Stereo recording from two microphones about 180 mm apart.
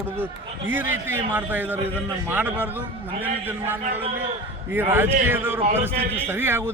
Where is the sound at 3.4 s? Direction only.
10° right (ahead or behind).